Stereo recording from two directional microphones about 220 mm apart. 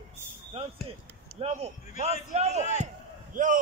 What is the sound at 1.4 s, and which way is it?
A man's voice, 30° right (ahead or behind).